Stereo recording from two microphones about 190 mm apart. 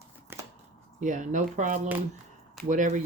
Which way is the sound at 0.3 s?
10° right (ahead or behind).